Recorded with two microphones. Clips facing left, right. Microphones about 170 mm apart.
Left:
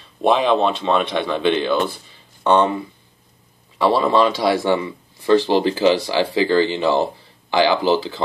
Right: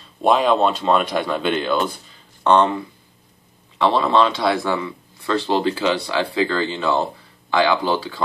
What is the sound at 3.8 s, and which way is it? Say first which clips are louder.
Speech: left 1 dB; 10° left (ahead or behind).